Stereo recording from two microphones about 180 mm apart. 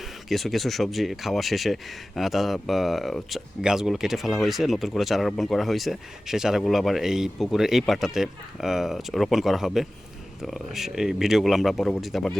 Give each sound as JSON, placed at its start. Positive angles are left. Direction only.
{"t": 0.3, "sound": "speech", "side_deg": 0}